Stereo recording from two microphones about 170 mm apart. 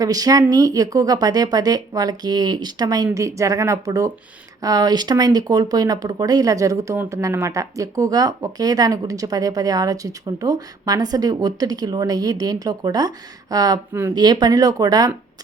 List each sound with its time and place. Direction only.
0.0 s speech: 20° right (ahead or behind)